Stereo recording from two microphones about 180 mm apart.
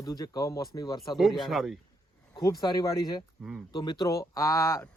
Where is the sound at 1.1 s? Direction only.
Centre (ahead or behind).